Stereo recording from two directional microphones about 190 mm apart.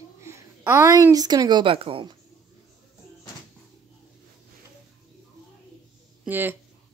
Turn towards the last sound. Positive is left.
turn(degrees=-10)  # may be behind; listen again after turning